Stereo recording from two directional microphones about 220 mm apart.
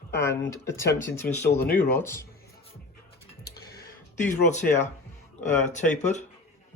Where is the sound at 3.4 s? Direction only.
40° left (ahead or behind).